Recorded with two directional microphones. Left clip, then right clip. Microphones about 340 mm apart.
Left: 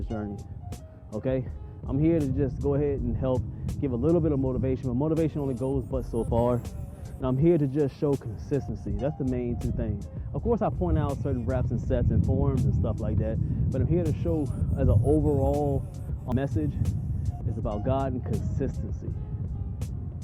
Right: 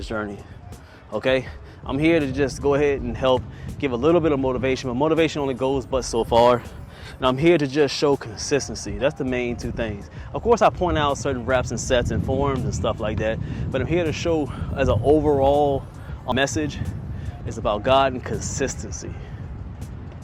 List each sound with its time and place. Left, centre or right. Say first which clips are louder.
0.1 s speech: right 8 dB; centre
14.9 s speech: right 7 dB; right
15.2 s speech: right 9 dB; centre